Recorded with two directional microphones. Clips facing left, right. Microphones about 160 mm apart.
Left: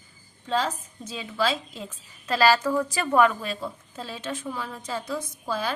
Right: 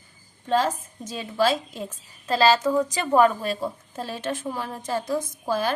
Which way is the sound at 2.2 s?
25° right (ahead or behind).